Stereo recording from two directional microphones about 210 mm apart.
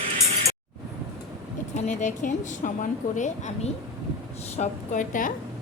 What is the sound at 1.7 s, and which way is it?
A woman's voice, 35° left (ahead or behind).